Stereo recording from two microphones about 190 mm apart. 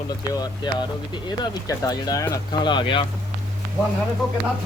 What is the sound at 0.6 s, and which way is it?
Speech, 20° left (ahead or behind).